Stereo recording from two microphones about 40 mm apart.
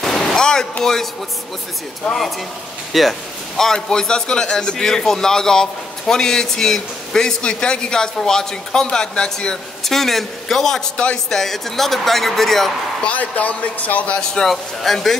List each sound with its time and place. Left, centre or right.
0.0 s a sound: centre
2.0 s a man's voice: centre
2.9 s speech: centre
3.5 s a man's voice: centre
9.8 s a man's voice: centre
13.0 s speech: left
14.3 s speech: centre